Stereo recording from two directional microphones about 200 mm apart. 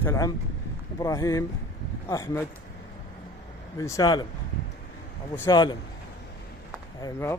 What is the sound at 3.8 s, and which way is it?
Speech, 15° left (ahead or behind).